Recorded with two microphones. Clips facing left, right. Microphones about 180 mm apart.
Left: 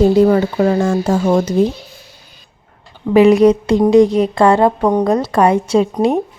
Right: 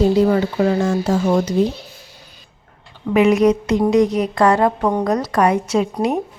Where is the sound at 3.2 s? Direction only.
35° left (ahead or behind).